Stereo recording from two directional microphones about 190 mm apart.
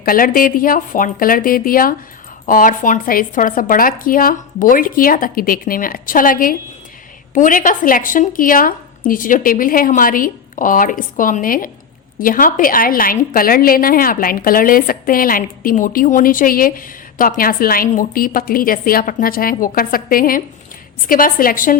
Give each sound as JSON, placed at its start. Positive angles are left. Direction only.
{"t": 0.0, "sound": "a woman's voice", "side_deg": 50}